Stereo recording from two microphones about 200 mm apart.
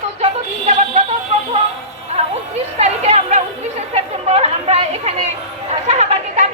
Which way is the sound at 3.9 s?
30° right (ahead or behind).